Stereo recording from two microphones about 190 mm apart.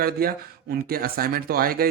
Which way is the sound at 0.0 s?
50° right (ahead or behind).